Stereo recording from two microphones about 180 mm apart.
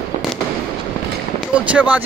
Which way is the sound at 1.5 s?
5° right (ahead or behind).